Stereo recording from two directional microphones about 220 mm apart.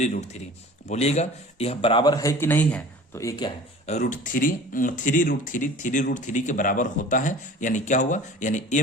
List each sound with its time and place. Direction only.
0.0 s speech: 30° left (ahead or behind); by 3.5 s 15° left (ahead or behind)
3.8 s speech: 35° left (ahead or behind)